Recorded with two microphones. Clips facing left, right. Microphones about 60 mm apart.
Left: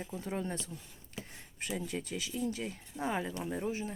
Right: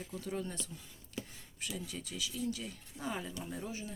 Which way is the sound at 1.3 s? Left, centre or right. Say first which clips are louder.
Left 4 dB; left.